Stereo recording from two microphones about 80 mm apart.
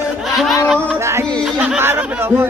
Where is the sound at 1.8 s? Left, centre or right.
Right.